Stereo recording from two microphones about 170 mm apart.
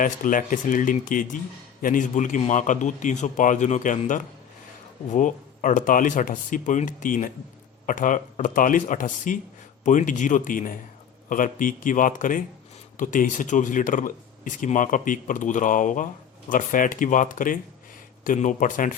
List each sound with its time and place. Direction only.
0.0 s speech: 50° left (ahead or behind)